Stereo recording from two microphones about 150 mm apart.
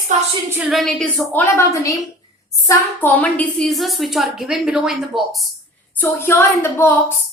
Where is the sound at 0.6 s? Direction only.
Centre (ahead or behind).